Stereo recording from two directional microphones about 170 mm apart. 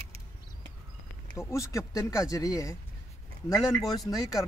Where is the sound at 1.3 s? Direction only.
15° left (ahead or behind).